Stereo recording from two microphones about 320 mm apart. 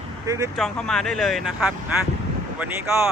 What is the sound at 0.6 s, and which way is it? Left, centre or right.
Speech, centre.